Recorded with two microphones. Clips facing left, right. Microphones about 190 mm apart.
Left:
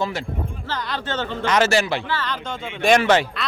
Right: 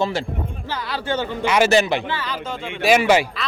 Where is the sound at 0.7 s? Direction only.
5° right (ahead or behind).